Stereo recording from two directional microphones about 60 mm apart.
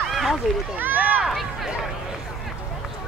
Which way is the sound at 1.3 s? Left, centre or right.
Centre.